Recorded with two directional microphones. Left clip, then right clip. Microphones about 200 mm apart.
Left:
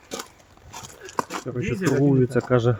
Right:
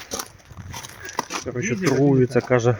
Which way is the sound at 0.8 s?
50° right (ahead or behind).